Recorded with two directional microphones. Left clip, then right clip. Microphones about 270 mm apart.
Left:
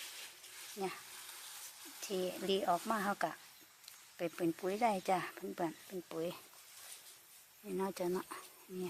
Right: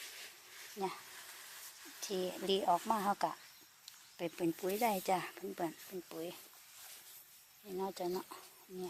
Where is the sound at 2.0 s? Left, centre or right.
Centre.